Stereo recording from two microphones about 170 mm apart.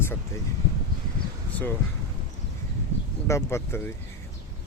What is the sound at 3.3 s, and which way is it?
Speech, 15° left (ahead or behind).